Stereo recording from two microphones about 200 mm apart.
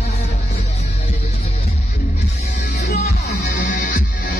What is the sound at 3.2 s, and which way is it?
Music, 45° left (ahead or behind).